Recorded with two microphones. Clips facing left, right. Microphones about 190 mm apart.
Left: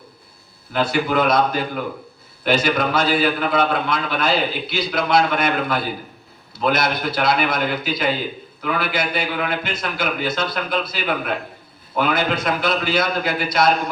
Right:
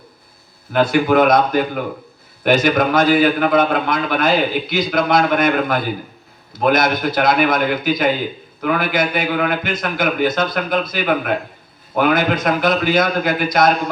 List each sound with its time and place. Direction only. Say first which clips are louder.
0.7 s a man's voice: right 6 dB; 50° right (ahead or behind)